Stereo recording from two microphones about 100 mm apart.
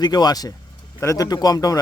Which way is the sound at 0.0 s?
40° left (ahead or behind).